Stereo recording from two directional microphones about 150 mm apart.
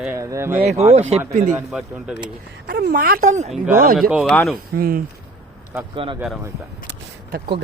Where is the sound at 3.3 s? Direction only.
50° right (ahead or behind).